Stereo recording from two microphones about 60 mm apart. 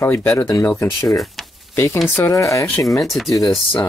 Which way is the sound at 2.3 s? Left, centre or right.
Left.